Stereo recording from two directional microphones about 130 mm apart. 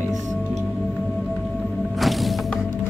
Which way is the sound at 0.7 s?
Centre (ahead or behind).